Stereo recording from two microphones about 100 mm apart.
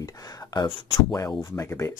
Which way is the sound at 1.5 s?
30° left (ahead or behind).